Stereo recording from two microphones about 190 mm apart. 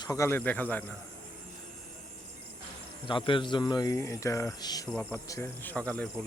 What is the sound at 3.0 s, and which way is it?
A man's voice, 25° left (ahead or behind).